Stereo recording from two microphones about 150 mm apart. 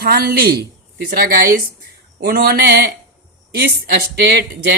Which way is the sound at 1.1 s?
75° right (ahead or behind).